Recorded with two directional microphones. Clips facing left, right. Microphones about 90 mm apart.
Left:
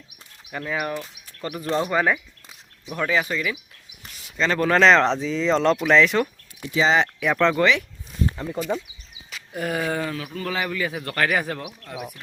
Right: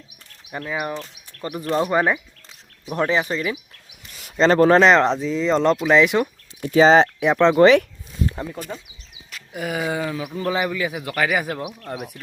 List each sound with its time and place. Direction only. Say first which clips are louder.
1.4 s speech: right 2 dB; 25° right (ahead or behind)
4.8 s speech: right 1 dB; 10° right (ahead or behind)
5.9 s speech: right 1 dB; 15° right (ahead or behind)
6.6 s speech: right 7 dB; 45° right (ahead or behind)
7.3 s speech: right 4 dB; 20° right (ahead or behind)
7.6 s speech: right 8 dB; 40° right (ahead or behind)
8.7 s speech: left 7 dB; 25° left (ahead or behind)
9.3 s speech: even; 5° right (ahead or behind)